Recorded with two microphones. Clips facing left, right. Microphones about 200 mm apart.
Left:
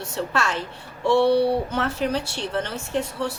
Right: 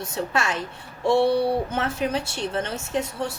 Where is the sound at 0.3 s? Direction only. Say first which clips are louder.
Even; 15° right (ahead or behind).